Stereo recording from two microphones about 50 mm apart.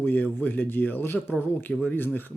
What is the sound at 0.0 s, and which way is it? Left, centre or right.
Speech, left.